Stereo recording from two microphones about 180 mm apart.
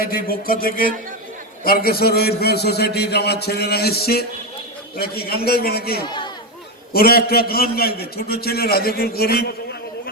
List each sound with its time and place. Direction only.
0.0 s a man's voice: 55° left (ahead or behind)
6.1 s chatter: 25° left (ahead or behind)
6.9 s a man's voice: 55° left (ahead or behind)